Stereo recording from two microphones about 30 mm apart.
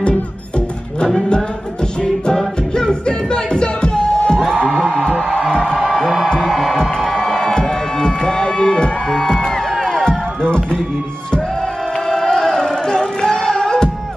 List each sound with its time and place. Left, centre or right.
2.7 s music: left
5.9 s music: centre
6.4 s music: centre
7.2 s music: left
9.8 s a sound: centre
10.4 s music: left
12.1 s music: centre